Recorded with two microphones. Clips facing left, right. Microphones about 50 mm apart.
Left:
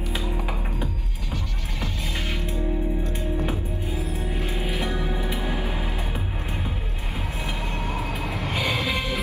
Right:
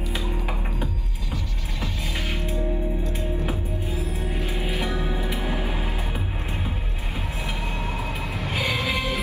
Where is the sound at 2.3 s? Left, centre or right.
Right.